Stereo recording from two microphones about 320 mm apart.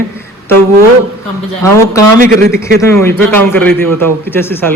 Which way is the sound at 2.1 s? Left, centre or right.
Right.